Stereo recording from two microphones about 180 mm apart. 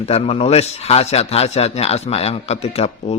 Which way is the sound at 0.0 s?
35° left (ahead or behind).